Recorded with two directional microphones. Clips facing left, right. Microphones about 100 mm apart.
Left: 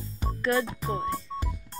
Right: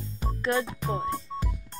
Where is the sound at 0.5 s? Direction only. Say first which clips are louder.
Even; centre (ahead or behind).